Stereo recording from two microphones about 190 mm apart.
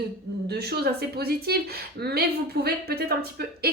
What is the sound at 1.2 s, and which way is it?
A woman's voice, 55° right (ahead or behind).